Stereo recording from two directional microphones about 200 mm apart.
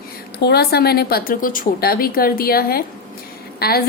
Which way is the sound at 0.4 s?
55° left (ahead or behind).